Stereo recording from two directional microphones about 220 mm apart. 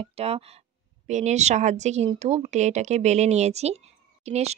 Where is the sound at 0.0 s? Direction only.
25° right (ahead or behind).